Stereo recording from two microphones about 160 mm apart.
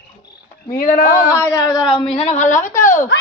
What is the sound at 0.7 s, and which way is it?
Speech, 60° left (ahead or behind).